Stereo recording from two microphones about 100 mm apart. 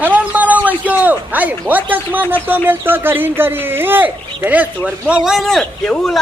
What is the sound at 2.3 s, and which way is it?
A man's voice, 20° right (ahead or behind).